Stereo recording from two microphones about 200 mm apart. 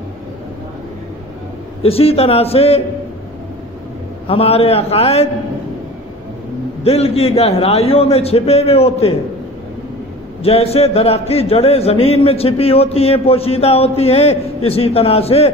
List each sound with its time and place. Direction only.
1.8 s a man's voice: 30° left (ahead or behind)
4.3 s a man's voice: 30° left (ahead or behind)
6.8 s a man's voice: 30° left (ahead or behind)
10.4 s a man's voice: 30° left (ahead or behind)